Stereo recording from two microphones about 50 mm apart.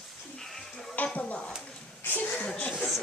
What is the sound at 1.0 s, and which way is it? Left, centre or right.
Speech, left.